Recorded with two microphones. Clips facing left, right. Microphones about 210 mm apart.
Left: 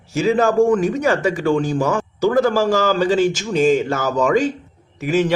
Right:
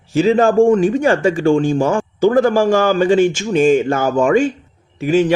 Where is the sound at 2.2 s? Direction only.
50° right (ahead or behind).